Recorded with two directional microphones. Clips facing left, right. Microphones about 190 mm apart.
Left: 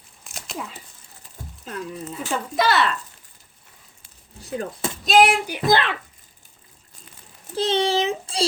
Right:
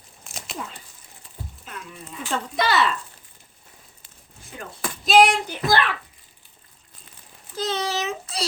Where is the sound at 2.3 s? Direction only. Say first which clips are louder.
Left 2 dB; centre (ahead or behind).